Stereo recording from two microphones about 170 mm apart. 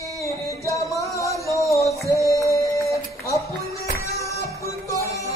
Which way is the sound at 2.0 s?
20° right (ahead or behind).